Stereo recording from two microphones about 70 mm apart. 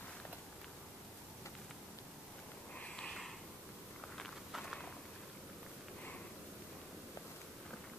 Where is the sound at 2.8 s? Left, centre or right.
Centre.